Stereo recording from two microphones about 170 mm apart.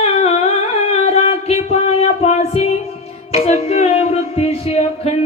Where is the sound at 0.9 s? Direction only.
40° left (ahead or behind).